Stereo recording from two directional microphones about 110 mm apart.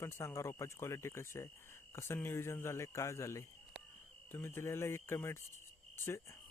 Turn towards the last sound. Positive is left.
turn(degrees=25)  # may be behind; listen again after turning